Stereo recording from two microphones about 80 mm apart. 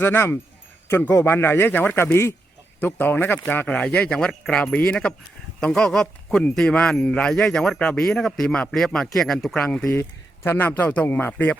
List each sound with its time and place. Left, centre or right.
0.0 s speech: left; by 4.6 s centre
4.6 s speech: centre
9.9 s speech: left